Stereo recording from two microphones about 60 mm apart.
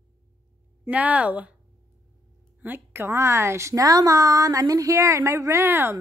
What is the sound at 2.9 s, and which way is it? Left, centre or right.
A woman's voice, right.